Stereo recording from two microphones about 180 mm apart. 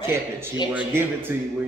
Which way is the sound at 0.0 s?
15° right (ahead or behind).